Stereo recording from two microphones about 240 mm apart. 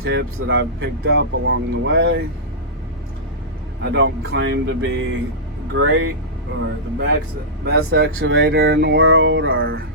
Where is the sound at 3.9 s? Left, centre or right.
Right.